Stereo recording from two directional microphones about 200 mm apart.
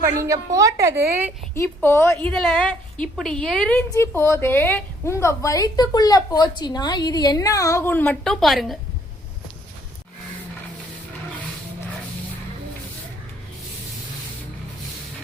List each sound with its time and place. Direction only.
0.0 s a woman's voice: 15° right (ahead or behind)
1.5 s a woman's voice: 10° left (ahead or behind)